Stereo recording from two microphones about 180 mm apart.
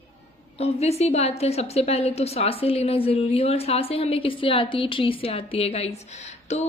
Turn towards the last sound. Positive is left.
turn(degrees=40)  # may be behind; listen again after turning